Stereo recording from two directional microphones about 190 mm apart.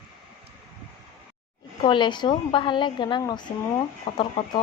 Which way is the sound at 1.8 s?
25° left (ahead or behind).